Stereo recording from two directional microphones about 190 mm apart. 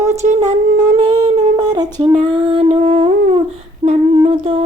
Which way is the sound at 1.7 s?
20° right (ahead or behind).